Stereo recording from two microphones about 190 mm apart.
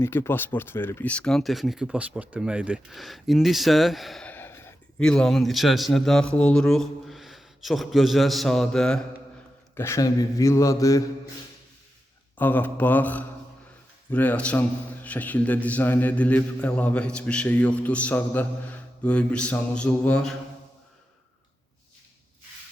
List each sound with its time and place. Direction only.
0.0 s speech: 15° left (ahead or behind)
9.7 s a man's voice: 15° left (ahead or behind)
12.4 s a man's voice: 10° left (ahead or behind)